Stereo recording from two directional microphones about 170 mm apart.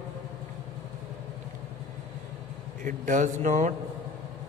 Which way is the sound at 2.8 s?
50° right (ahead or behind).